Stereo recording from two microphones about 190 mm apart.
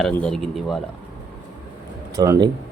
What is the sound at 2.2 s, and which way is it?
Speech, 20° right (ahead or behind).